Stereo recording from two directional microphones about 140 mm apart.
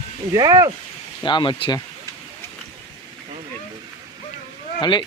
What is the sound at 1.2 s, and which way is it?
Speech, 35° left (ahead or behind).